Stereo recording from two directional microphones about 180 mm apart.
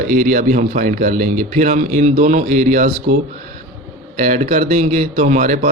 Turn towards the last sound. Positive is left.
turn(degrees=-45)  # may be behind; listen again after turning